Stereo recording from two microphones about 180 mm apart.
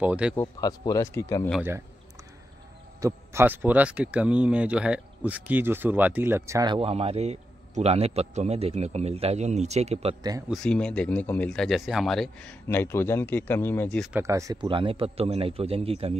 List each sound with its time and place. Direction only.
0.0 s speech: 5° right (ahead or behind)
0.4 s speech: 20° left (ahead or behind)
3.0 s speech: 15° right (ahead or behind); by 10.1 s 35° right (ahead or behind)
10.5 s speech: 5° left (ahead or behind)
14.1 s speech: 15° right (ahead or behind); by 16.2 s 35° right (ahead or behind)